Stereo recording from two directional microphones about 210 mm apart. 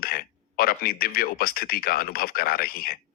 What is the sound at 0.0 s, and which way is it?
A man's voice, 45° left (ahead or behind).